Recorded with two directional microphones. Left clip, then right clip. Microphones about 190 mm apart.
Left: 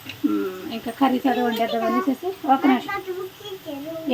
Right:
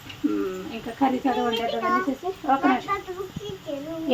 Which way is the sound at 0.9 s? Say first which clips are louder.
Left 2 dB; 10° left (ahead or behind).